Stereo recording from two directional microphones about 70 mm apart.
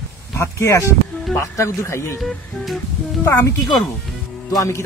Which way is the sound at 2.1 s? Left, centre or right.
Centre.